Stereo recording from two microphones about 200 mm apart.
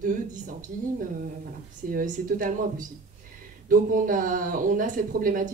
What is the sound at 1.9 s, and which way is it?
Speech, 45° right (ahead or behind).